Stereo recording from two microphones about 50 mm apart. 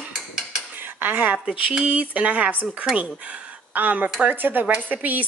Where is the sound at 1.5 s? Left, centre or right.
Right.